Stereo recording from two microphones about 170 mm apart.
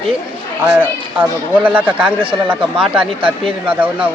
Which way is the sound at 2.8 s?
30° right (ahead or behind).